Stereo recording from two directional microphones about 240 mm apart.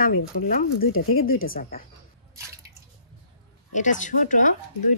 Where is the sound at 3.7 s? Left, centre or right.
Left.